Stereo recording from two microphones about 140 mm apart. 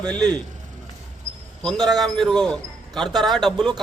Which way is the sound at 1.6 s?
5° left (ahead or behind).